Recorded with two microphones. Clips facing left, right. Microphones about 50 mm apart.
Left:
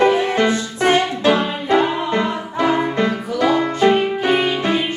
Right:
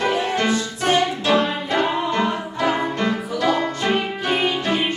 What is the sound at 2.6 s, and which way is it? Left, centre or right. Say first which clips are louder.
Music: left 4 dB; centre.